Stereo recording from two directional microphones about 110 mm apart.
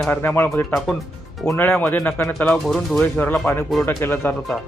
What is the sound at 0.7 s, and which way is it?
Speech, centre (ahead or behind).